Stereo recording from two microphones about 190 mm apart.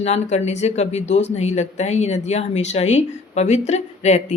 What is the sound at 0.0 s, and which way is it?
Speech, 35° left (ahead or behind).